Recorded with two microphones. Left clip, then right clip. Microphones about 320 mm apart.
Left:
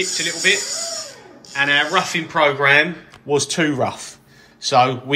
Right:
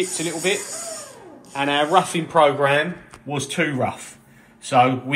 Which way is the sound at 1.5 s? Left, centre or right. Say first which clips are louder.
Left 1 dB; centre.